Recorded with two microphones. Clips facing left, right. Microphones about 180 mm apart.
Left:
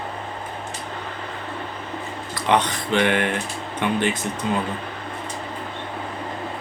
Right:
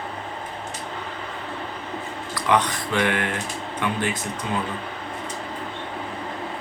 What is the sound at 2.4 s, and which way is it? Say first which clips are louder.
Speech: left 1 dB; 25° left (ahead or behind).